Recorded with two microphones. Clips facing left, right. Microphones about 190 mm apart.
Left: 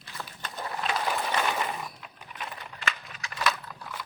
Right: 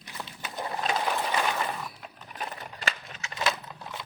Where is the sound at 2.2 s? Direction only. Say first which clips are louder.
Right 2 dB; 40° right (ahead or behind).